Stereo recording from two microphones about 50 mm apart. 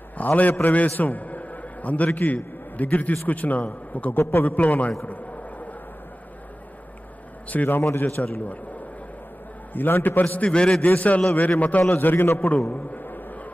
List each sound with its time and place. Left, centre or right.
0.2 s a man's voice: left
4.1 s a man's voice: left
4.5 s a man's voice: left
7.4 s a man's voice: left
9.8 s a man's voice: left
10.4 s a man's voice: centre
10.8 s a man's voice: left
12.0 s a man's voice: left
12.6 s bee: left